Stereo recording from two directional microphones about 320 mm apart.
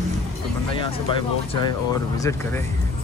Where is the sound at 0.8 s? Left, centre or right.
Centre.